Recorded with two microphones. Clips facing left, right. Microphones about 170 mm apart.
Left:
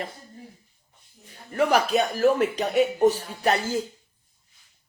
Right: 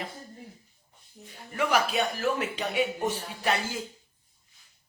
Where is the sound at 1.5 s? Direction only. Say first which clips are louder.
Left 5 dB; 40° left (ahead or behind).